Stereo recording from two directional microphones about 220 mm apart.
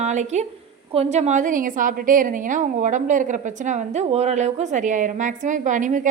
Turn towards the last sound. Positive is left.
turn(degrees=-35)  # may be behind; listen again after turning